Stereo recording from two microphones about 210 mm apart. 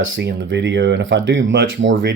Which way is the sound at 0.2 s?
55° right (ahead or behind).